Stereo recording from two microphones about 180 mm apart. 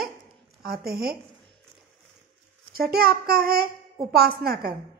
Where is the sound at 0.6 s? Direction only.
60° right (ahead or behind).